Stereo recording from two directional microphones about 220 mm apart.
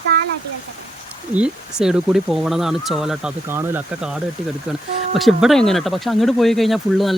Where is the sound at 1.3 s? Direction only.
5° right (ahead or behind).